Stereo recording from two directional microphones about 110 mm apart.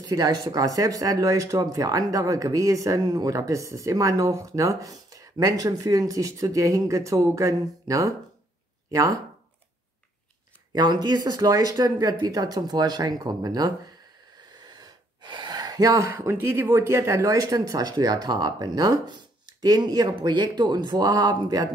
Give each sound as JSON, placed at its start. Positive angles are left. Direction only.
{"t": 0.0, "sound": "speech", "side_deg": -35}
{"t": 10.7, "sound": "speech", "side_deg": -40}